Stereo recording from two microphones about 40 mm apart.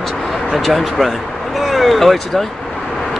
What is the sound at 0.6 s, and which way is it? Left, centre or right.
Speech, centre.